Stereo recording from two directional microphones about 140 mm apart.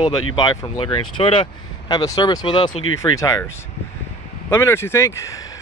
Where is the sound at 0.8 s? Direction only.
35° left (ahead or behind).